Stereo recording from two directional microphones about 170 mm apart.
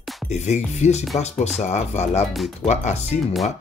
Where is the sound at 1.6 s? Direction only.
40° left (ahead or behind).